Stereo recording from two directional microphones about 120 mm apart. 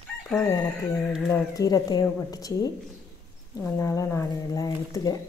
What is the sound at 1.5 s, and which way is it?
Speech, 30° left (ahead or behind).